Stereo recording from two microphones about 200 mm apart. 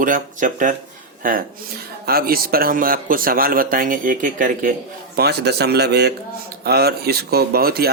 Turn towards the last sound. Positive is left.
turn(degrees=-50)  # may be behind; listen again after turning